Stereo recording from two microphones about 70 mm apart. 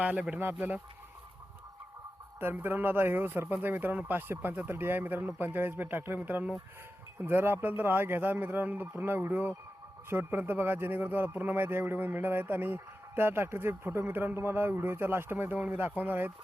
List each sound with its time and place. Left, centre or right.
0.0 s speech: right
2.4 s speech: right